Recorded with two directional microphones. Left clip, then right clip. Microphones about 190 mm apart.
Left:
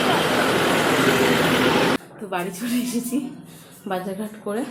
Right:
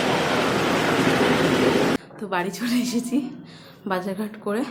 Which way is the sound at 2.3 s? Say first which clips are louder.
Right 1 dB; 10° right (ahead or behind).